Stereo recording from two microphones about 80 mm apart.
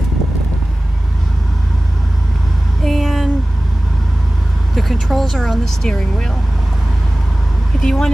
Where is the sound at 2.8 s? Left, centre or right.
Centre.